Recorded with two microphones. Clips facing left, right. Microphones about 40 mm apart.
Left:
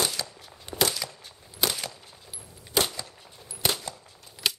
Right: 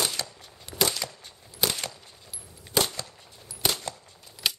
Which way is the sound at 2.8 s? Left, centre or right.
Centre.